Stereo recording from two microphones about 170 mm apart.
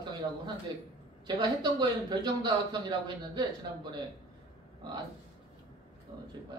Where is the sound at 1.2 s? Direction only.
25° right (ahead or behind).